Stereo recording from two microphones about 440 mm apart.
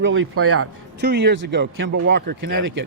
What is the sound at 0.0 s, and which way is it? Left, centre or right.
Speech, right.